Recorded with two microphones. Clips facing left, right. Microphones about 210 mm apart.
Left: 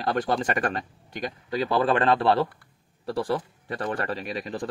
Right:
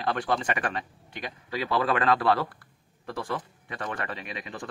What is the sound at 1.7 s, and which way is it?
A man's voice, 30° left (ahead or behind).